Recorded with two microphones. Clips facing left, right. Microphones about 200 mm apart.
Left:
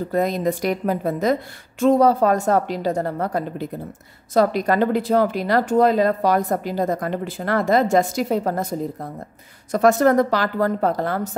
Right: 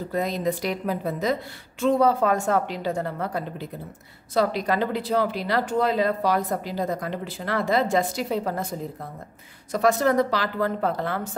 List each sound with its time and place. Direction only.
0.1 s speech: 50° left (ahead or behind)